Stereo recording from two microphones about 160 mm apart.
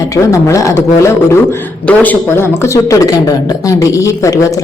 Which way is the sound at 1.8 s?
10° left (ahead or behind).